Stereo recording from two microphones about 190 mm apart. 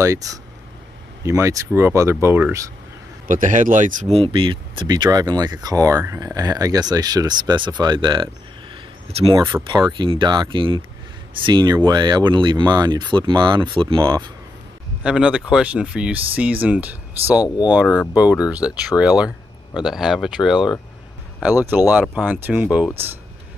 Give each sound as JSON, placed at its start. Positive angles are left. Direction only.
{"t": 0.0, "sound": "speech", "side_deg": -15}
{"t": 3.3, "sound": "speech", "side_deg": -45}
{"t": 9.3, "sound": "speech", "side_deg": -15}
{"t": 9.9, "sound": "speech", "side_deg": -25}
{"t": 15.0, "sound": "speech", "side_deg": -5}
{"t": 17.4, "sound": "speech", "side_deg": 20}
{"t": 18.1, "sound": "speech", "side_deg": -5}
{"t": 21.9, "sound": "speech", "side_deg": -5}